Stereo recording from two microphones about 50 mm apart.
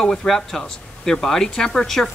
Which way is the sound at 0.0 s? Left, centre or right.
Centre.